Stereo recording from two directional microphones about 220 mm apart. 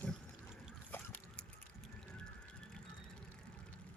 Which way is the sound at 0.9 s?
5° left (ahead or behind).